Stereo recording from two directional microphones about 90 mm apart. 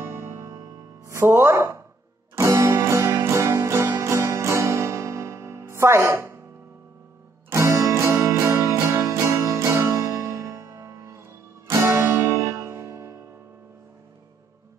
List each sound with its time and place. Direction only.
0.2 s music: 30° right (ahead or behind)
7.5 s music: 35° right (ahead or behind)